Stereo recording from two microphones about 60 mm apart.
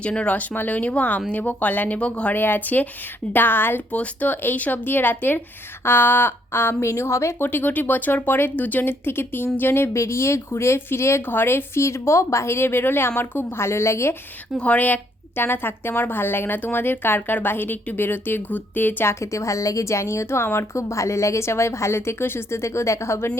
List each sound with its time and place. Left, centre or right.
0.0 s speech: centre
2.3 s a woman's voice: left
3.9 s a woman's voice: left
11.2 s speech: left
14.6 s a woman's voice: left
19.2 s speech: left